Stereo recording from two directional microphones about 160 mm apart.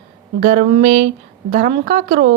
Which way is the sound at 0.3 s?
55° right (ahead or behind).